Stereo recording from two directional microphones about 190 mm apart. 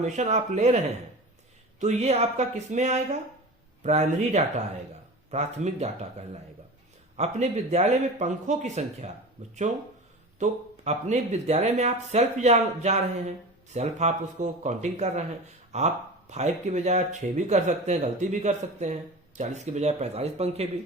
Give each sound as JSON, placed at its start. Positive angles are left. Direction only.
{"t": 0.0, "sound": "speech", "side_deg": -35}
{"t": 1.8, "sound": "speech", "side_deg": -35}